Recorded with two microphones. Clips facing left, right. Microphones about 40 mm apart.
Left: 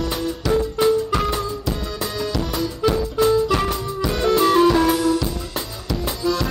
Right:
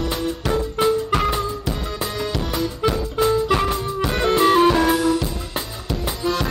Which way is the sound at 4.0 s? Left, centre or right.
Right.